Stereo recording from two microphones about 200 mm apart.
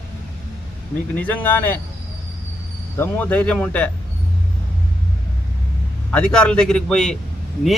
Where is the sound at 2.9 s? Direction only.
10° left (ahead or behind).